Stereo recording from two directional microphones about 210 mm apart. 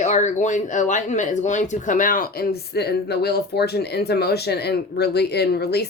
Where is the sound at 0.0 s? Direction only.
35° left (ahead or behind).